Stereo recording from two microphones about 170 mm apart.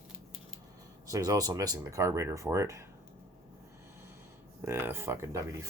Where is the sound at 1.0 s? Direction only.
20° right (ahead or behind).